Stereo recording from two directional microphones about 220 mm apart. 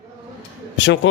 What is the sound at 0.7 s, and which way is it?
Speech, 55° left (ahead or behind).